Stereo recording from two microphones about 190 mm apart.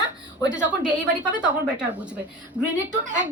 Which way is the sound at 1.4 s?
5° right (ahead or behind).